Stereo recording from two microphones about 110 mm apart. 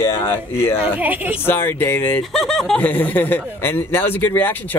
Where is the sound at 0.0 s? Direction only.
25° left (ahead or behind).